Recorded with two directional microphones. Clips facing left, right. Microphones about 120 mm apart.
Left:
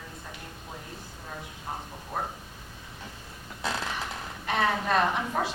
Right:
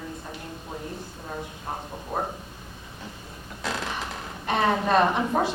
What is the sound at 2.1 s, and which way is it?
Speech, 25° right (ahead or behind).